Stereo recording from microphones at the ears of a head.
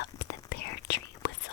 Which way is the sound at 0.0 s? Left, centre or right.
Left.